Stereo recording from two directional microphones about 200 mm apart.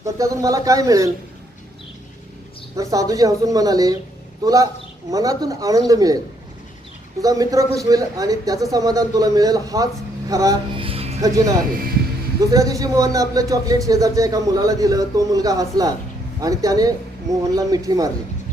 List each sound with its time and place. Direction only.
0.0 s speech: 15° right (ahead or behind)
2.7 s speech: 15° right (ahead or behind)
7.2 s speech: 15° right (ahead or behind)
10.8 s music: 30° right (ahead or behind)
11.2 s speech: 15° right (ahead or behind)